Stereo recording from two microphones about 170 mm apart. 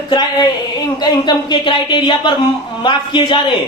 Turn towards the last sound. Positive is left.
turn(degrees=30)  # may be behind; listen again after turning